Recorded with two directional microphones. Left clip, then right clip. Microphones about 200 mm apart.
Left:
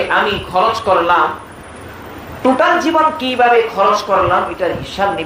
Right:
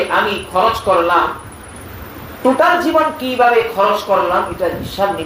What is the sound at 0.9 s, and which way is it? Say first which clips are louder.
Speech: left 1 dB; 20° left (ahead or behind).